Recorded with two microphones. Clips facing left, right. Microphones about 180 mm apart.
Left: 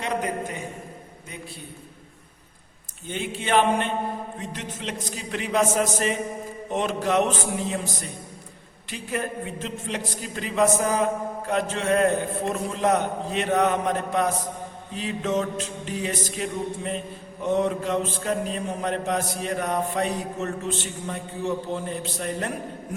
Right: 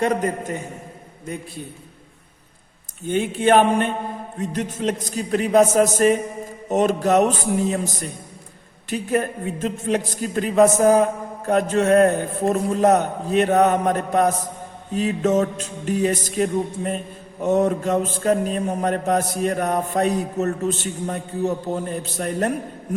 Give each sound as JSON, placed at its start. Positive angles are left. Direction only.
{"t": 0.0, "sound": "a man's voice", "side_deg": -45}
{"t": 3.1, "sound": "a man's voice", "side_deg": -50}
{"t": 8.9, "sound": "a man's voice", "side_deg": -45}